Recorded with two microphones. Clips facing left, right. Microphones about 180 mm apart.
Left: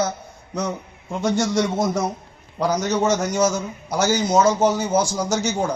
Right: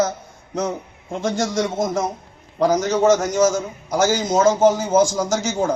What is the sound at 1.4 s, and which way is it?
Speech, 50° right (ahead or behind).